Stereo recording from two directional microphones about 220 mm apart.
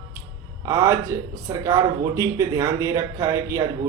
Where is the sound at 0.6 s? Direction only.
15° right (ahead or behind).